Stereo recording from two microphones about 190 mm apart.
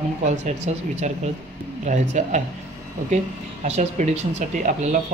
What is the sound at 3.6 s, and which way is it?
Speech, 35° right (ahead or behind).